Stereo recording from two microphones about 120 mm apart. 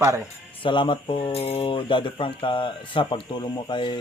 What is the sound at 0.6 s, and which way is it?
Speech, 45° left (ahead or behind).